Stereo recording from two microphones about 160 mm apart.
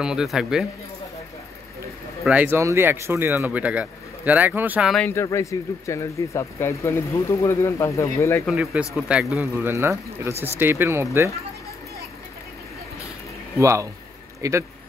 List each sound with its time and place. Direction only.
0.0 s speech: 5° right (ahead or behind)
2.2 s speech: 10° right (ahead or behind)
4.9 s speech: 10° left (ahead or behind)
8.5 s speech: 5° right (ahead or behind)
13.6 s speech: 20° right (ahead or behind)